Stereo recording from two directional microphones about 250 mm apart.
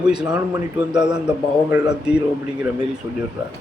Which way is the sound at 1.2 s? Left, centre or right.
Centre.